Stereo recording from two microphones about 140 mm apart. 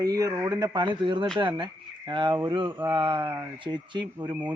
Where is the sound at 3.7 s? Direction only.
25° right (ahead or behind).